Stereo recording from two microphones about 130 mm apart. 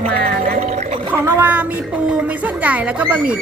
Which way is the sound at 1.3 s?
15° right (ahead or behind).